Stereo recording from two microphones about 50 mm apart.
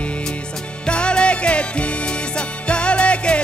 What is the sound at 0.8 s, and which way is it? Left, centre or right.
Music, left.